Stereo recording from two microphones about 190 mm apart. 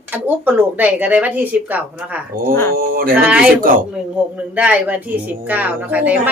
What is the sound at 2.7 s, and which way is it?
Speech, 50° right (ahead or behind).